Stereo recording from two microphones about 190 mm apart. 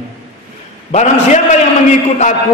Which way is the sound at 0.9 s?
40° left (ahead or behind).